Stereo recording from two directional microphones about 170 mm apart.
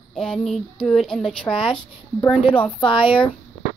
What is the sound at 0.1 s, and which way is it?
Speech, centre (ahead or behind).